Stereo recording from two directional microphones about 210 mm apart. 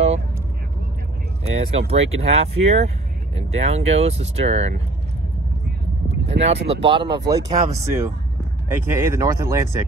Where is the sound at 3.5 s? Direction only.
30° right (ahead or behind).